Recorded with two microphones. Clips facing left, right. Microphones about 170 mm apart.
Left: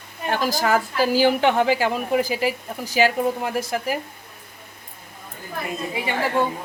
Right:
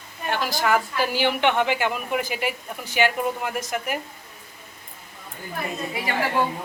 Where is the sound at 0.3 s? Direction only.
40° left (ahead or behind).